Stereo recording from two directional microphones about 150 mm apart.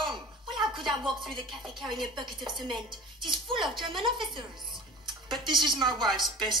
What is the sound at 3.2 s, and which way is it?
Music, 35° right (ahead or behind).